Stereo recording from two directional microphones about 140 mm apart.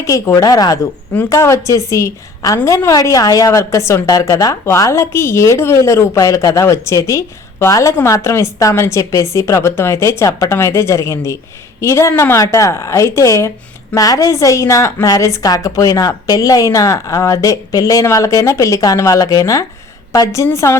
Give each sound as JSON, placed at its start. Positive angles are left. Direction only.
{"t": 0.0, "sound": "a woman's voice", "side_deg": 25}